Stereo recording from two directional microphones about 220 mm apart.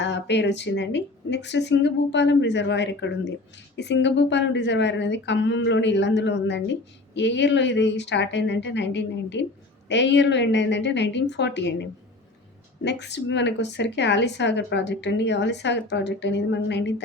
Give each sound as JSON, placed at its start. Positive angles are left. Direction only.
{"t": 0.0, "sound": "speech", "side_deg": 50}